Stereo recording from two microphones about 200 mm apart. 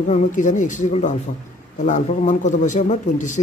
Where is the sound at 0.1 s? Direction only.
40° left (ahead or behind).